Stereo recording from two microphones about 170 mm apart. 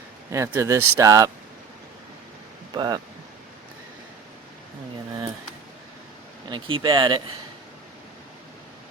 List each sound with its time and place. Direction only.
0.3 s speech: 15° right (ahead or behind)
2.7 s speech: 25° right (ahead or behind)
6.5 s speech: 30° right (ahead or behind)